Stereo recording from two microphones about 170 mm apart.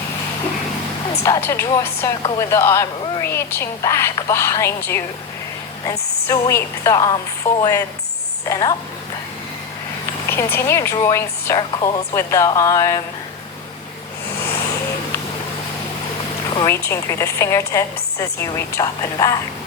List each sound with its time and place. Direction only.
1.2 s a woman's voice: 15° left (ahead or behind)
10.2 s a woman's voice: 15° left (ahead or behind)
16.6 s a woman's voice: 15° left (ahead or behind)